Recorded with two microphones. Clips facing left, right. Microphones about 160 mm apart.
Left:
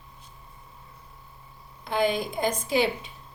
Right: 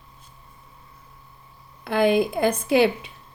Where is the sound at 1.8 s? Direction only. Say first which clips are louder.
Right 6 dB; 60° right (ahead or behind).